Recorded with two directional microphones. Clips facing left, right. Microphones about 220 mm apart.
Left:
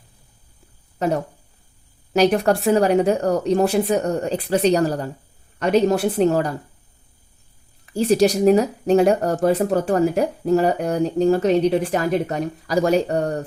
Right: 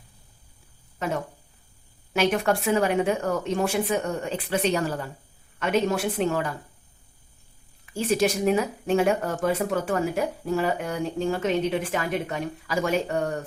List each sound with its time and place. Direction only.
0.9 s speech: 40° left (ahead or behind)
7.9 s speech: 35° left (ahead or behind)